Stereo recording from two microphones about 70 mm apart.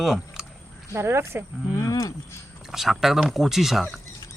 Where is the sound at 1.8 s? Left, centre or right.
Left.